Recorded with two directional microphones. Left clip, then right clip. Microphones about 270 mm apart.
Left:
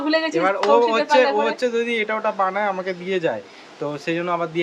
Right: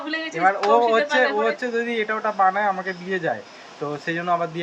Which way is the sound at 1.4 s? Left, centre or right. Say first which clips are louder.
Left 2 dB; centre.